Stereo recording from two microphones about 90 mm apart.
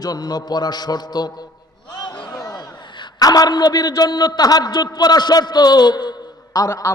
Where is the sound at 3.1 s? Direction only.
45° left (ahead or behind).